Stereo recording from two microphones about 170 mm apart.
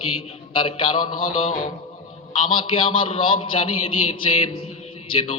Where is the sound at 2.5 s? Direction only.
30° left (ahead or behind).